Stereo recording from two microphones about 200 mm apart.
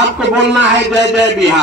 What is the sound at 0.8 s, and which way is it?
Speech, 60° right (ahead or behind).